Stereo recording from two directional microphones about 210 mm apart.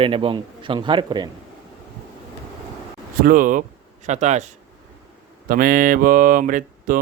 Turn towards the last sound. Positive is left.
turn(degrees=-40)  # may be behind; listen again after turning